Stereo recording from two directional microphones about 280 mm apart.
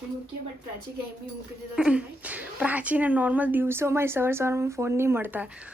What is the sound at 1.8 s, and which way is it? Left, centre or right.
A woman's voice, centre.